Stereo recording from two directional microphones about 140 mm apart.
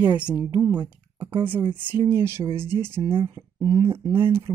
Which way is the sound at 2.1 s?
15° right (ahead or behind).